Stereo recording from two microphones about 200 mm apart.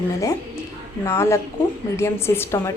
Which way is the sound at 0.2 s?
15° left (ahead or behind).